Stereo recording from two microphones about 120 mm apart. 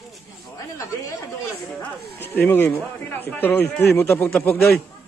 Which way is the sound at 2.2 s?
20° left (ahead or behind).